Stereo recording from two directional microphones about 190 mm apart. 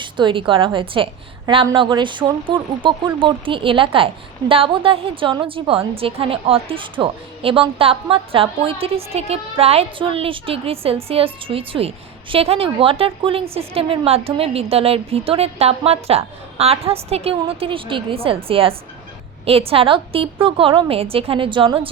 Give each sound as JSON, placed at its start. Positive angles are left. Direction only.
{"t": 0.0, "sound": "speech", "side_deg": -25}